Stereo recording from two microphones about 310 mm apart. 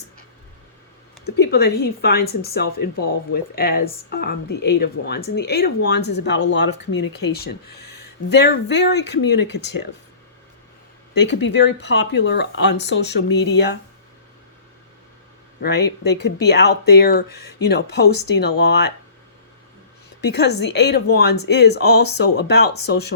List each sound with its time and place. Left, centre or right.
1.2 s a woman's voice: left
7.9 s a sound: left
8.7 s speech: left
11.1 s speech: left
15.6 s speech: left
20.2 s speech: left